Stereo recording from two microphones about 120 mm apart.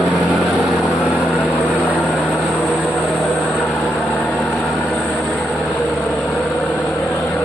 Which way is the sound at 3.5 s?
Centre (ahead or behind).